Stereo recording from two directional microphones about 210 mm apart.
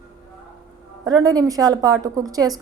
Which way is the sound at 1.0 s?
15° right (ahead or behind).